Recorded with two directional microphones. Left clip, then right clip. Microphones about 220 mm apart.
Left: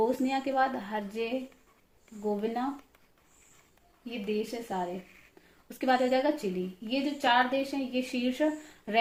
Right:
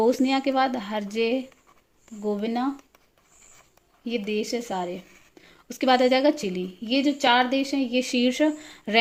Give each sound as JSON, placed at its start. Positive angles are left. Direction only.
{"t": 0.0, "sound": "a woman's voice", "side_deg": -45}
{"t": 4.0, "sound": "a woman's voice", "side_deg": -45}